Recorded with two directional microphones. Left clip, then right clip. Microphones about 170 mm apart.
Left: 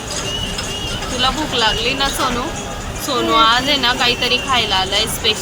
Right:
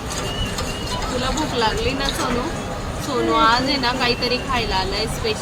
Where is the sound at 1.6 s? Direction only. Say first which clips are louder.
Left 5 dB; 5° left (ahead or behind).